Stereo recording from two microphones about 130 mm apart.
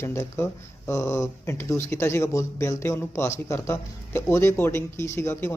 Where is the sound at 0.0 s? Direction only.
20° left (ahead or behind).